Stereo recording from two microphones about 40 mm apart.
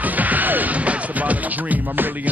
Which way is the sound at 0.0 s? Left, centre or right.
Right.